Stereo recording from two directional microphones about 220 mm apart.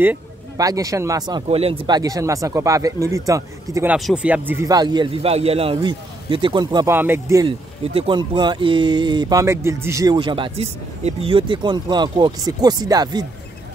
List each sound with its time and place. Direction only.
0.0 s speech: 10° right (ahead or behind)